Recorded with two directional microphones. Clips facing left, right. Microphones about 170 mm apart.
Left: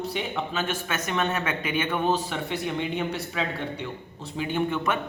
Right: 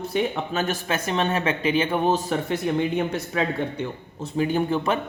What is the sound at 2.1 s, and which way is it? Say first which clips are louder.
Speech: right 4 dB; 45° right (ahead or behind).